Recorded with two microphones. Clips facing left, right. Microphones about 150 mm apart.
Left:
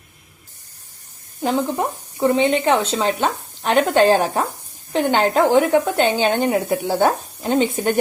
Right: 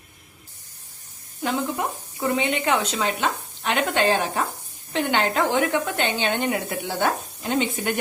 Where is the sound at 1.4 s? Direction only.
35° left (ahead or behind).